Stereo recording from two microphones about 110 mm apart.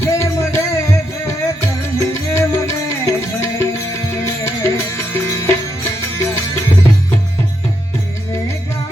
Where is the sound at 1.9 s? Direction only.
25° left (ahead or behind).